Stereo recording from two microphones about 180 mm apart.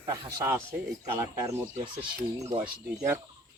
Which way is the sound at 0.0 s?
20° right (ahead or behind).